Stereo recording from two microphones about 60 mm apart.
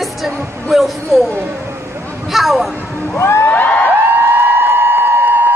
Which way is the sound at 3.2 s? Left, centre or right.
Left.